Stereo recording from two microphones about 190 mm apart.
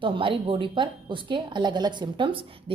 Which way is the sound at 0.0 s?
25° right (ahead or behind).